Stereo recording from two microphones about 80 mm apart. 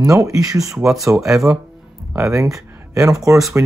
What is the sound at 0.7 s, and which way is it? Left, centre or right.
Speech, centre.